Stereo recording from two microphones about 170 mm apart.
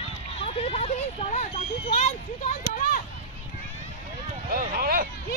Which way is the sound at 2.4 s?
50° left (ahead or behind).